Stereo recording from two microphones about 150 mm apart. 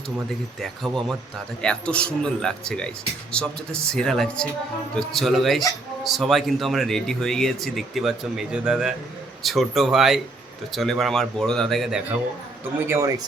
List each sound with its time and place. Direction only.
0.6 s a man's voice: centre (ahead or behind)
12.9 s speech: 20° right (ahead or behind)